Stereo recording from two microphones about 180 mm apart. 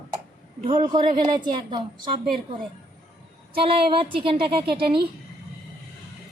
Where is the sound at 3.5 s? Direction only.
30° right (ahead or behind).